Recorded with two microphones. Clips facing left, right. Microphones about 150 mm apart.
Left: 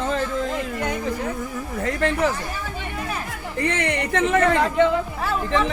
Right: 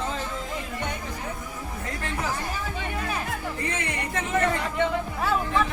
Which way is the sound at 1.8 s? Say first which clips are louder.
Left 11 dB; 75° left (ahead or behind).